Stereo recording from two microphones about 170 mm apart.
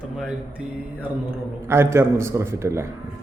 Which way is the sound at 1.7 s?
15° right (ahead or behind).